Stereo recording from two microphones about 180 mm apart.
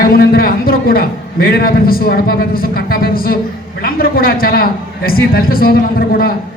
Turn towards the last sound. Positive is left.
turn(degrees=55)  # may be behind; listen again after turning